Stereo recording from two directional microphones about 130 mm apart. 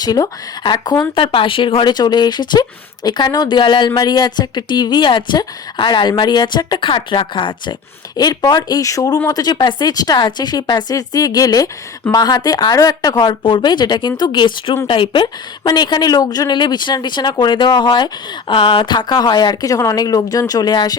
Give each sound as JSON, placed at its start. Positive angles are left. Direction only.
{"t": 0.0, "sound": "speech", "side_deg": 30}